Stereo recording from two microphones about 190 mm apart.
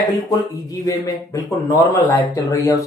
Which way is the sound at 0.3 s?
20° left (ahead or behind).